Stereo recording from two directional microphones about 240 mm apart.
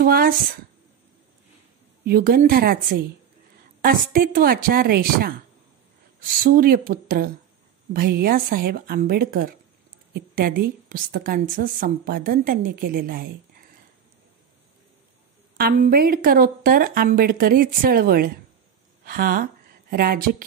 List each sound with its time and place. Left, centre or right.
0.0 s a woman's voice: right
2.0 s a woman's voice: right
15.5 s a woman's voice: right